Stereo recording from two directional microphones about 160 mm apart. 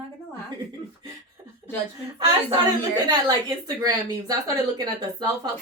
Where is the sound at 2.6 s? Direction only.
25° right (ahead or behind).